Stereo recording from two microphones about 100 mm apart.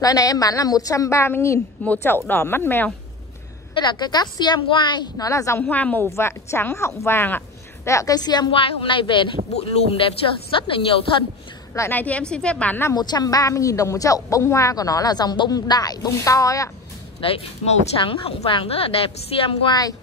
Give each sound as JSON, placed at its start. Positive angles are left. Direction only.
{"t": 0.0, "sound": "a woman's voice", "side_deg": 35}
{"t": 3.7, "sound": "a woman's voice", "side_deg": 50}
{"t": 5.1, "sound": "a woman's voice", "side_deg": 35}
{"t": 5.6, "sound": "a woman's voice", "side_deg": 15}
{"t": 6.0, "sound": "speech", "side_deg": 25}
{"t": 7.0, "sound": "a sound", "side_deg": 25}
{"t": 7.9, "sound": "a woman's voice", "side_deg": 35}
{"t": 8.5, "sound": "speech", "side_deg": 65}
{"t": 9.5, "sound": "speech", "side_deg": 75}
{"t": 11.9, "sound": "a woman's voice", "side_deg": 15}
{"t": 12.9, "sound": "a woman's voice", "side_deg": 45}
{"t": 17.2, "sound": "speech", "side_deg": 65}